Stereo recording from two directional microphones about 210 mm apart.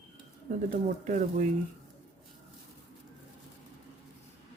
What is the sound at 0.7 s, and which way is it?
Speech, 35° right (ahead or behind).